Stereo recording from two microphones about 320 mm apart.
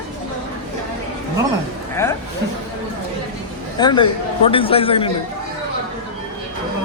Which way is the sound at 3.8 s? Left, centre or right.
Centre.